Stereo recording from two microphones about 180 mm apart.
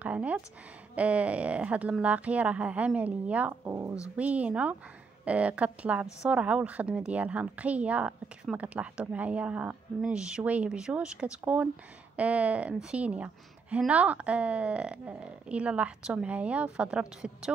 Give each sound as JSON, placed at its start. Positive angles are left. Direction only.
{"t": 0.0, "sound": "speech", "side_deg": -10}